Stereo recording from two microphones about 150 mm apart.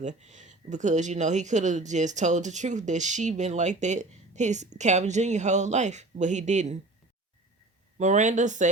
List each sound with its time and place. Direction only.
0.0 s speech: 50° right (ahead or behind)
7.9 s speech: 55° right (ahead or behind)